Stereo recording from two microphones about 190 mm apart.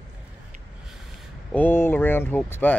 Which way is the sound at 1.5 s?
10° left (ahead or behind).